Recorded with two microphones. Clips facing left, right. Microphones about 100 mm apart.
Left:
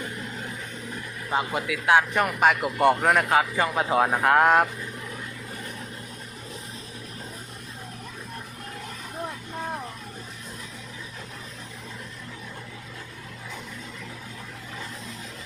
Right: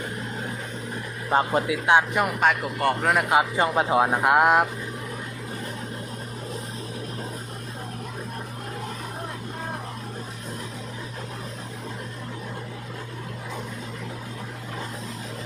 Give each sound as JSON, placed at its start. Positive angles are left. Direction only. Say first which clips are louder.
{"t": 1.3, "sound": "speech", "louder": "right 5 dB", "side_deg": -40}
{"t": 1.6, "sound": "speech", "louder": "right 1 dB", "side_deg": -25}
{"t": 2.1, "sound": "speech", "louder": "even", "side_deg": 0}
{"t": 3.5, "sound": "speech", "louder": "right 2 dB", "side_deg": -25}